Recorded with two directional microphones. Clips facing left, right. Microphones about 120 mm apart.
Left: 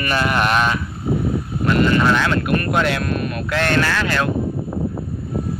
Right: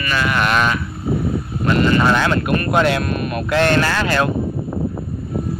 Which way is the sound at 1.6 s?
5° right (ahead or behind).